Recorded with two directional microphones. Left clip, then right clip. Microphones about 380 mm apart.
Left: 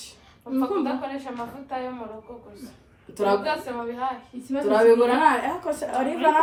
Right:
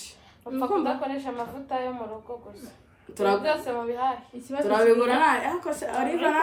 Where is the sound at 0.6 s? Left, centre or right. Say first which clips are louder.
Right 1 dB; right.